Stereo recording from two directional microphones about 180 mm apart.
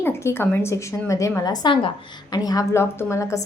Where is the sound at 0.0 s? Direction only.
15° left (ahead or behind).